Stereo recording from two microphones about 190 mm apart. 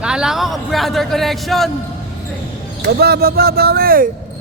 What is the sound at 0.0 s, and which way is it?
A man's voice, 5° right (ahead or behind).